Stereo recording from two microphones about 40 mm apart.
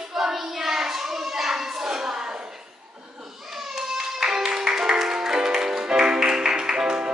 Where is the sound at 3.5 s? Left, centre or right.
Centre.